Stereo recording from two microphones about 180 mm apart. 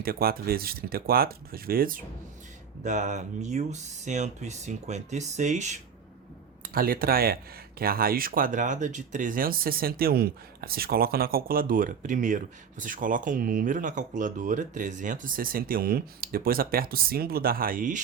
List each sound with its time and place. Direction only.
0.0 s speech: 55° right (ahead or behind)
2.8 s speech: 40° right (ahead or behind)
6.6 s speech: 55° right (ahead or behind)